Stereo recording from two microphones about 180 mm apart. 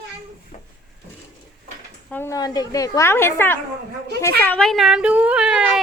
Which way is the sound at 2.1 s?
15° left (ahead or behind).